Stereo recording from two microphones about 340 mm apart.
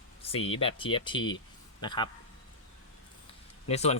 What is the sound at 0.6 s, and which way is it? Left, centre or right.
A man's voice, centre.